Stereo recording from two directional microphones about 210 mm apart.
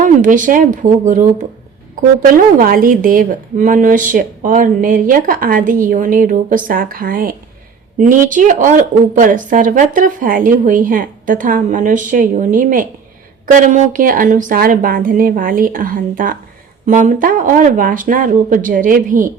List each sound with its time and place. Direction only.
0.0 s a woman's voice: 40° right (ahead or behind)